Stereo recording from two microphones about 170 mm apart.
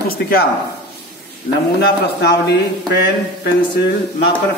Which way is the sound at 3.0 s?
80° left.